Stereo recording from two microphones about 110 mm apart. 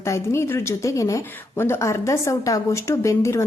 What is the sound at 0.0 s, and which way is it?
A woman's voice, 25° left (ahead or behind).